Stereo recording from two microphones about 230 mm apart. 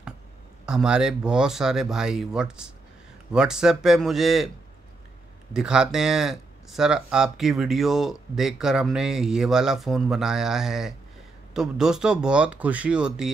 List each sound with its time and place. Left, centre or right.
0.7 s speech: centre
5.5 s speech: centre